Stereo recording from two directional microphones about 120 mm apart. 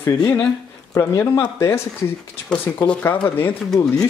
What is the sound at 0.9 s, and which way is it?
Speech, 20° left (ahead or behind).